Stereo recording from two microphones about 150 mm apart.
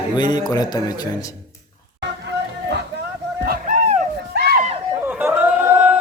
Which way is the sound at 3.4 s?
75° right (ahead or behind).